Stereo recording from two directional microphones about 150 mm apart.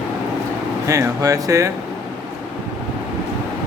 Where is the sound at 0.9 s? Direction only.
20° right (ahead or behind).